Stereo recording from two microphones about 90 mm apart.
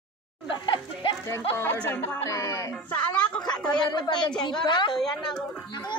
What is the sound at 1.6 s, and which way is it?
Speech, 25° left (ahead or behind).